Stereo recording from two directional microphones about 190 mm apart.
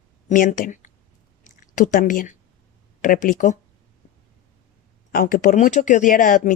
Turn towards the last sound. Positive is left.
turn(degrees=45)  # may be behind; listen again after turning